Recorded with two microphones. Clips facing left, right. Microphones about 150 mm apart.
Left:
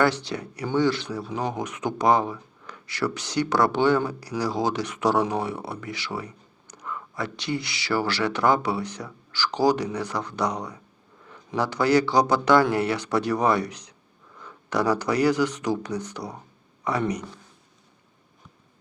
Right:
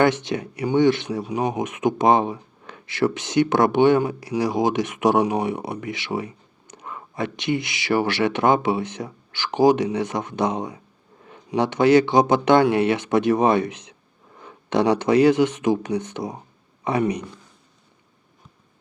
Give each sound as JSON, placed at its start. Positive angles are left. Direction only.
{"t": 0.0, "sound": "speech", "side_deg": -20}